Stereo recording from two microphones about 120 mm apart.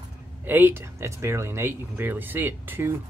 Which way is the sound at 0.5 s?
15° right (ahead or behind).